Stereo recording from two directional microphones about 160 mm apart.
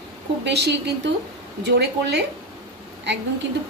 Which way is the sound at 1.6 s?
90° right.